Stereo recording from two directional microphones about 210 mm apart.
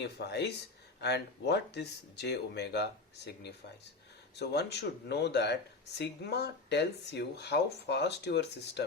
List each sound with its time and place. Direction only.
0.0 s speech: 55° left (ahead or behind)